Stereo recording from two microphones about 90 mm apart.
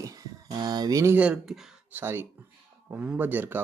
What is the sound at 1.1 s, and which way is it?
Speech, 15° right (ahead or behind).